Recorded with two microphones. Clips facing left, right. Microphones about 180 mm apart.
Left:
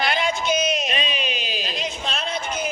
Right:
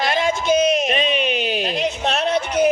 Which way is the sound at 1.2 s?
65° right (ahead or behind).